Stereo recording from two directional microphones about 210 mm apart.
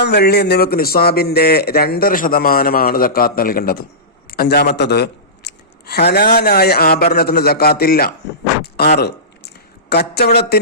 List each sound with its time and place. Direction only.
0.0 s a man's voice: 50° left (ahead or behind)
8.6 s a sound: 50° left (ahead or behind)
9.9 s speech: 50° left (ahead or behind)